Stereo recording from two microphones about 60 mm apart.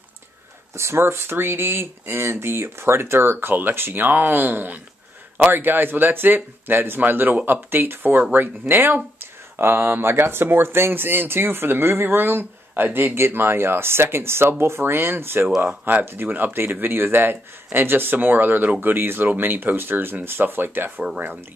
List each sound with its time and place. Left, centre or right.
0.7 s speech: right